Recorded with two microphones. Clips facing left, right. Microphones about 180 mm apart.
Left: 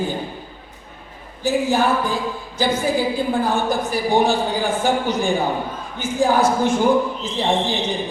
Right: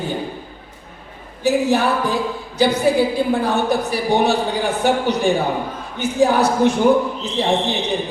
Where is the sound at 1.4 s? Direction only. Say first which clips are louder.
Right 2 dB; 65° right (ahead or behind).